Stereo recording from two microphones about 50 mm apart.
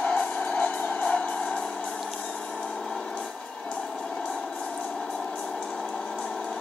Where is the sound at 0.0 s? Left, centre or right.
Left.